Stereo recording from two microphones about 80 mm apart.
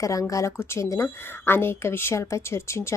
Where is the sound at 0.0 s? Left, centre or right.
Left.